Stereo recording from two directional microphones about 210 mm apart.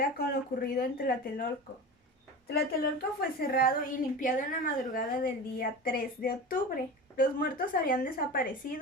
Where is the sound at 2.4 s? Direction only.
45° left (ahead or behind).